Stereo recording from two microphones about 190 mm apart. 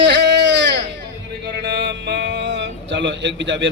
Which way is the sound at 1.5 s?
65° right (ahead or behind).